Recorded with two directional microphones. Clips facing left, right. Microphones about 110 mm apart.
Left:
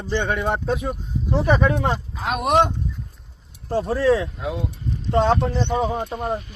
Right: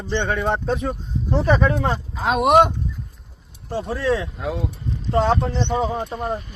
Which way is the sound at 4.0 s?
25° left (ahead or behind).